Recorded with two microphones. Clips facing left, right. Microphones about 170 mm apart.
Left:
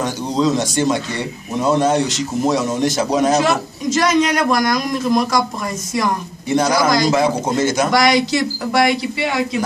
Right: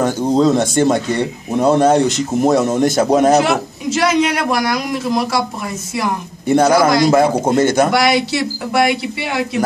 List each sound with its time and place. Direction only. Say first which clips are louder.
0.0 s a man's voice: right 5 dB; 50° right (ahead or behind)
3.4 s a man's voice: right 1 dB; 10° right (ahead or behind)
6.4 s a man's voice: right 5 dB; 55° right (ahead or behind)
7.9 s speech: even; 5° right (ahead or behind)